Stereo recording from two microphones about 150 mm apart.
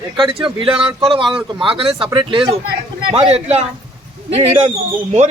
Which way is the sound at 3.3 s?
45° right (ahead or behind).